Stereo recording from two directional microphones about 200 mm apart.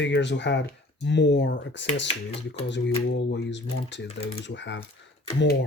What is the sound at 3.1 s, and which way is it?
Speech, 60° left (ahead or behind).